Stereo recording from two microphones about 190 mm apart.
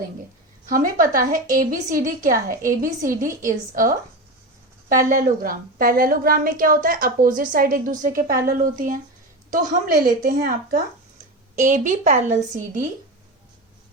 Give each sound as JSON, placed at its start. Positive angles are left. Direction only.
{"t": 0.7, "sound": "a woman's voice", "side_deg": -45}